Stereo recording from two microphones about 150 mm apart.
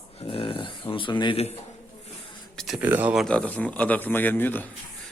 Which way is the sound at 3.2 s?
10° left (ahead or behind).